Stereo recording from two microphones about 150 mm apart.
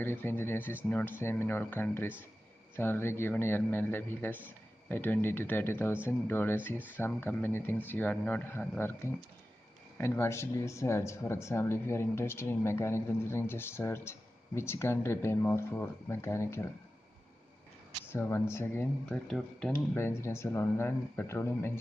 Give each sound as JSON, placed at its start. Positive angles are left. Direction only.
{"t": 0.0, "sound": "speech", "side_deg": 15}
{"t": 18.0, "sound": "speech", "side_deg": 15}
{"t": 19.0, "sound": "speech", "side_deg": 5}
{"t": 19.9, "sound": "speech", "side_deg": 15}